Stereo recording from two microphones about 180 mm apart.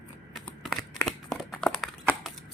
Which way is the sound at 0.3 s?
Centre (ahead or behind).